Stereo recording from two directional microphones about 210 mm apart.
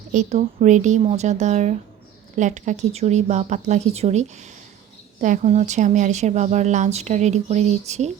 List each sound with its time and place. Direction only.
0.1 s speech: 35° right (ahead or behind)